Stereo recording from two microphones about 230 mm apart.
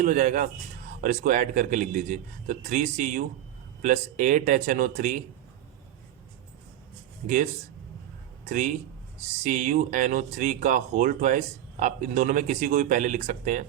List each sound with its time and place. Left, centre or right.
0.0 s speech: right
8.4 s speech: right